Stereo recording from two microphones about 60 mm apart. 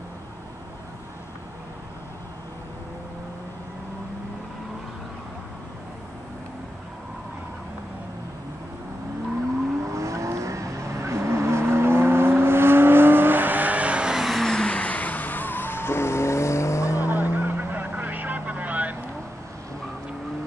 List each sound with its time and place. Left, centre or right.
9.8 s vehicle: right; by 14.4 s centre
14.4 s music: centre; by 17.1 s left
17.1 s vehicle: right